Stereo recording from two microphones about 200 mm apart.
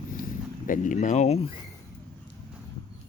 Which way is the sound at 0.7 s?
40° left (ahead or behind).